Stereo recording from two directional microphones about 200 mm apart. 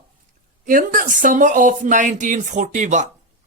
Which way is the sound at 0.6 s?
40° right (ahead or behind).